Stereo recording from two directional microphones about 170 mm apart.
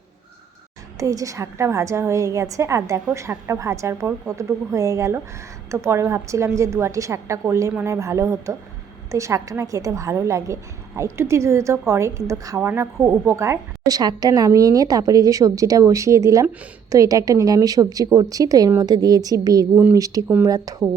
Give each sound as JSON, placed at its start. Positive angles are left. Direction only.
{"t": 0.9, "sound": "a woman's voice", "side_deg": -20}